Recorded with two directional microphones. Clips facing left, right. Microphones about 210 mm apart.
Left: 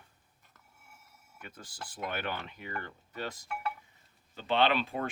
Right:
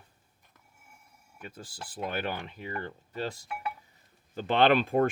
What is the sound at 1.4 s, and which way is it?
Speech, 30° right (ahead or behind).